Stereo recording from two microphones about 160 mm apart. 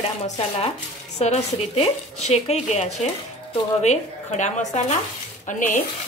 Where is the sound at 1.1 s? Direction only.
45° left (ahead or behind).